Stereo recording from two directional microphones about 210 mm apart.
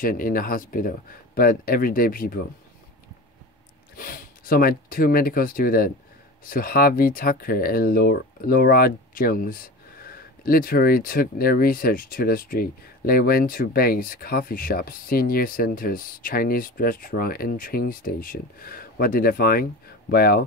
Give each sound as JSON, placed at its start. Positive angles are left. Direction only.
{"t": 0.0, "sound": "speech", "side_deg": 40}
{"t": 3.9, "sound": "speech", "side_deg": 45}